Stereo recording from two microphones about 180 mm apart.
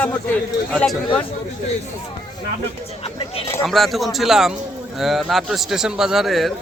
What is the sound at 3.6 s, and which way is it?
A man's voice, centre (ahead or behind).